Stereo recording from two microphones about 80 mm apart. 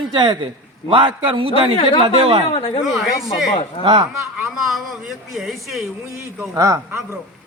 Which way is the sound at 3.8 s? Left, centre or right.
Right.